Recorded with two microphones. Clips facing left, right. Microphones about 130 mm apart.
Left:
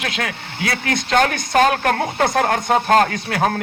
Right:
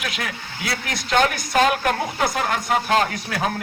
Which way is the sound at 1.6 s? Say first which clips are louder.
Left 3 dB; 55° left (ahead or behind).